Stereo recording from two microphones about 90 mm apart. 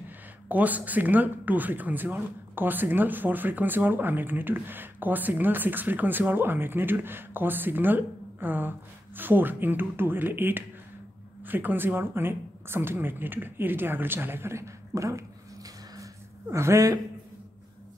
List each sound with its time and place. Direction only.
0.5 s speech: 20° right (ahead or behind); by 17.0 s 35° right (ahead or behind)